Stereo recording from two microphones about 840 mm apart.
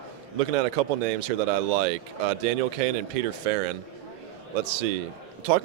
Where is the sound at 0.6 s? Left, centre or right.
Right.